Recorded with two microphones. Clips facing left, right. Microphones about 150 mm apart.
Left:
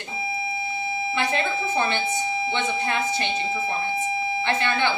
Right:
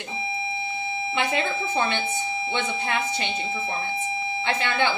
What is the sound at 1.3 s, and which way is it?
Speech, 15° right (ahead or behind).